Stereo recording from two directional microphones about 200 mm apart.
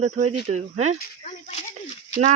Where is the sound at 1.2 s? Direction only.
35° left (ahead or behind).